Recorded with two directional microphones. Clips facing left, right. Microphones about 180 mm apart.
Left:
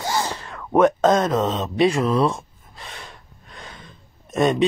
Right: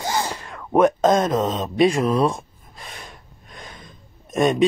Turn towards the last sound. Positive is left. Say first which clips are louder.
# even
turn(degrees=-10)  # may be behind; listen again after turning